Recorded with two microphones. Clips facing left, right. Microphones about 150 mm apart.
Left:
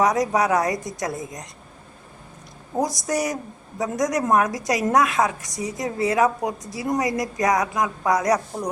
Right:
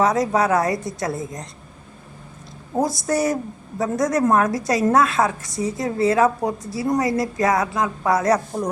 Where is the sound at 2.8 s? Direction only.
15° left (ahead or behind).